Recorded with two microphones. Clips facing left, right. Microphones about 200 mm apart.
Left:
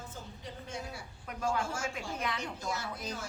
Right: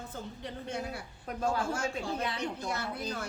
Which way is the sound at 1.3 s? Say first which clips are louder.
Right 2 dB; 35° right (ahead or behind).